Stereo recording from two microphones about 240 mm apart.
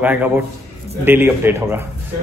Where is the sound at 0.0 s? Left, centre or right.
Centre.